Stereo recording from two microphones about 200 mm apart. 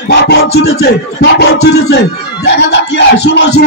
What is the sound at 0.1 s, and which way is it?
Music, 55° left (ahead or behind).